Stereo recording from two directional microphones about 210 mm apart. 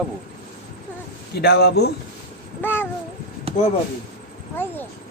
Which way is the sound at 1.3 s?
50° left (ahead or behind).